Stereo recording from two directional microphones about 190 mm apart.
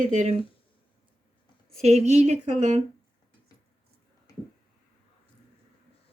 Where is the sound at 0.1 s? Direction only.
40° right (ahead or behind).